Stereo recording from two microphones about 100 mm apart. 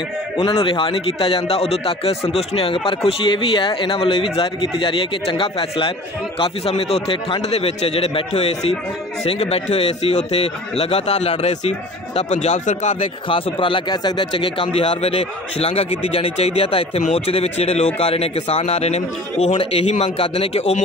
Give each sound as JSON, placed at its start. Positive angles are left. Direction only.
{"t": 0.4, "sound": "a man's voice", "side_deg": 60}
{"t": 13.0, "sound": "a man's voice", "side_deg": 60}
{"t": 15.0, "sound": "speech", "side_deg": 80}